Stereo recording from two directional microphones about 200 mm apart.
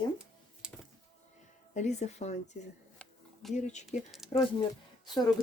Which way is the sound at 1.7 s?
35° left (ahead or behind).